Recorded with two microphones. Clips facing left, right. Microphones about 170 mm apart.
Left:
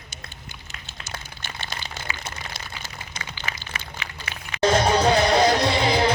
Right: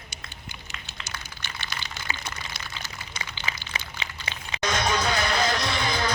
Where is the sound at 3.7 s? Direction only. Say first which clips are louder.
Even; 25° right (ahead or behind).